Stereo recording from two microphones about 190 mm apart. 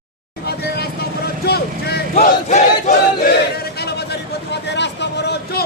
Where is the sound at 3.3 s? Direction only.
55° left (ahead or behind).